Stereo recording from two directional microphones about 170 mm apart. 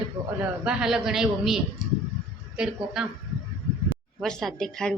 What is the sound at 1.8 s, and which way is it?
Speech, 25° right (ahead or behind).